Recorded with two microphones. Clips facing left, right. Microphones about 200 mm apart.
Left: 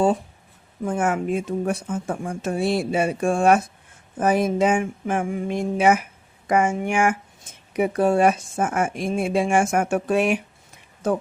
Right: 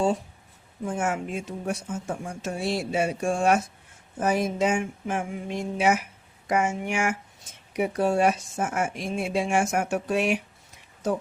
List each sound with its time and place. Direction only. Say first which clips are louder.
0.9 s speech: left 6 dB; 55° left (ahead or behind)